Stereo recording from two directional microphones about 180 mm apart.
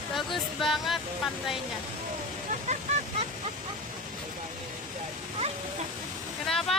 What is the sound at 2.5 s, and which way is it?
Vehicle, 45° right (ahead or behind).